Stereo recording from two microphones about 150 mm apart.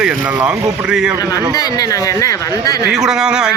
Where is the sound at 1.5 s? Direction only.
25° left (ahead or behind).